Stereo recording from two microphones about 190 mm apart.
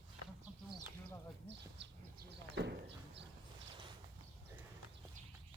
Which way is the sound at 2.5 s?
65° right (ahead or behind).